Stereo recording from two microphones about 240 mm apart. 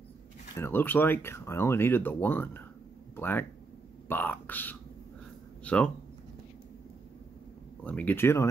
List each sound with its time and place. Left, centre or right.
0.6 s speech: centre
5.6 s a sound: centre
7.8 s speech: centre